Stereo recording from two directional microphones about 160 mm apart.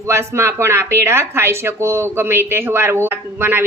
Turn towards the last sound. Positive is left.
turn(degrees=-15)  # may be behind; listen again after turning